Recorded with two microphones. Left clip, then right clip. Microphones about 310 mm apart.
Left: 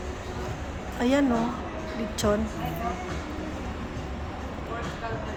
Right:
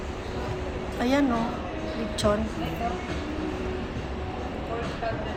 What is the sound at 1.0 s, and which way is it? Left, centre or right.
Speech, centre.